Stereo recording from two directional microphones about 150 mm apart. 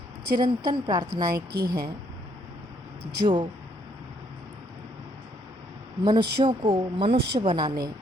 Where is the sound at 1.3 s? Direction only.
90° right.